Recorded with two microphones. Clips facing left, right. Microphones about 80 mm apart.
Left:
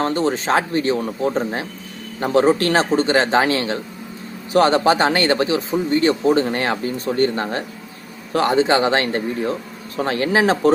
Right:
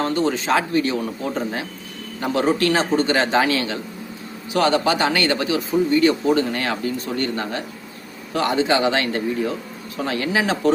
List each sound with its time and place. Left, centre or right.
0.0 s speech: left